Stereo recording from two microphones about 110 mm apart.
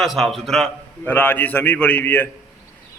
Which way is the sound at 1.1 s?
15° left (ahead or behind).